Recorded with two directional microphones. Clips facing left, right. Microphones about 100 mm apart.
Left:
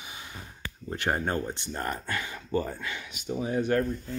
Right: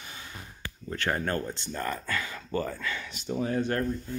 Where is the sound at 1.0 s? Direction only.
20° left (ahead or behind).